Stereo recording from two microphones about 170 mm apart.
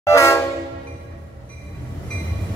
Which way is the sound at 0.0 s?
15° left (ahead or behind).